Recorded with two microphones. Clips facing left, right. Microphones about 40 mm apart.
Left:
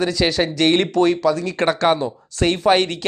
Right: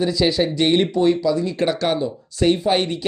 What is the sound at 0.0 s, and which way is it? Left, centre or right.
Speech, left.